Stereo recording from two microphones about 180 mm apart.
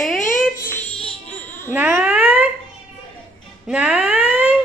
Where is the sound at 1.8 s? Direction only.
10° right (ahead or behind).